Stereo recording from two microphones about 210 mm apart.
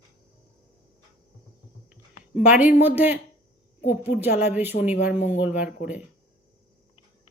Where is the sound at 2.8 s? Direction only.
10° right (ahead or behind).